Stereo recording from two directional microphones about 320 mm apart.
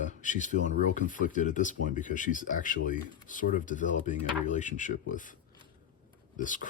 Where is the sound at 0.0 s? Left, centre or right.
Left.